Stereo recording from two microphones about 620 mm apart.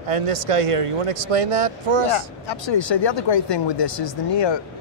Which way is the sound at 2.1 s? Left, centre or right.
Left.